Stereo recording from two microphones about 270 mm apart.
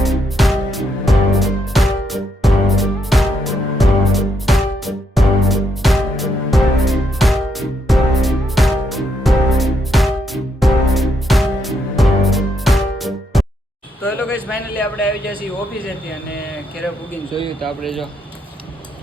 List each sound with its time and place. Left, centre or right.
0.0 s music: centre
14.2 s a sound: centre
17.7 s speech: centre